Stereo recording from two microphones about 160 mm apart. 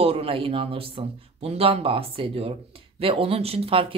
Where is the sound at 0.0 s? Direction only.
40° right (ahead or behind).